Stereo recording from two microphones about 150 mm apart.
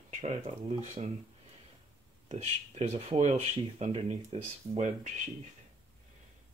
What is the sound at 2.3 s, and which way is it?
Speech, 45° right (ahead or behind).